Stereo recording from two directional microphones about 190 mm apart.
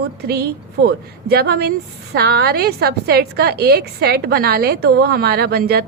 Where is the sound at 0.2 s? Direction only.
55° right (ahead or behind).